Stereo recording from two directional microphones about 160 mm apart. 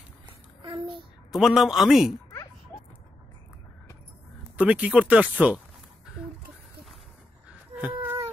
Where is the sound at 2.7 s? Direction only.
15° left (ahead or behind).